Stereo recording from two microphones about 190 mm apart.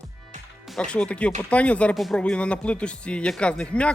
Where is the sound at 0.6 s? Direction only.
Centre (ahead or behind).